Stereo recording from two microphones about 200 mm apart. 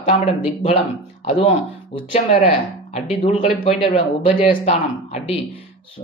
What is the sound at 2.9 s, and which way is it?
Speech, 35° left (ahead or behind).